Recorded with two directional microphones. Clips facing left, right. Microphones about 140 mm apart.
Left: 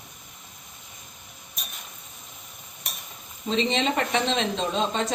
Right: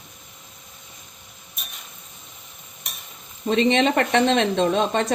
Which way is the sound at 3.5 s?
65° right (ahead or behind).